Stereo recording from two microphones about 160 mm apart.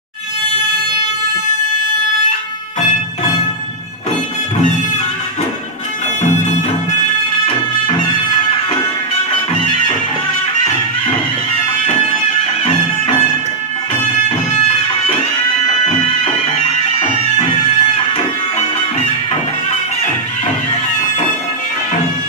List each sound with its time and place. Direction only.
16.5 s music: 35° left (ahead or behind)